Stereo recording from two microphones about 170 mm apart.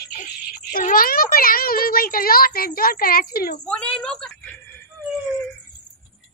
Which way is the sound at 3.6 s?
5° left (ahead or behind).